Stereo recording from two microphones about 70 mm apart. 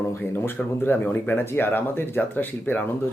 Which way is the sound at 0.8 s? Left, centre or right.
Left.